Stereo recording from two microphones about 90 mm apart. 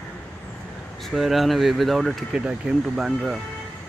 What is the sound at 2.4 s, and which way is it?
Speech, 10° right (ahead or behind).